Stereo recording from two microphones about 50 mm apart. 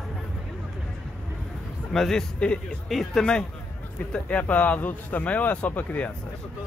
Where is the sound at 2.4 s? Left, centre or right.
Left.